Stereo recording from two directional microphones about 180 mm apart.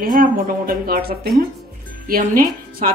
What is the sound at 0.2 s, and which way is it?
Speech, 50° right (ahead or behind).